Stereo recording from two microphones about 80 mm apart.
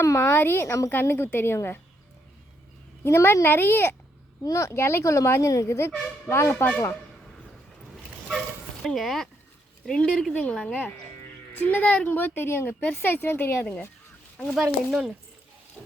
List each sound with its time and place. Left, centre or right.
0.0 s a woman's voice: left
3.0 s a woman's voice: left
4.4 s a child's voice: left
8.8 s a woman's voice: centre; by 13.7 s left
14.6 s speech: centre